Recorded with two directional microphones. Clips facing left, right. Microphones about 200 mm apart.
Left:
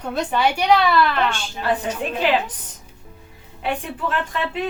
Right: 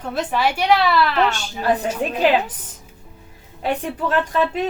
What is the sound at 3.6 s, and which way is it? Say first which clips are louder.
Speech: right 3 dB; 40° right (ahead or behind).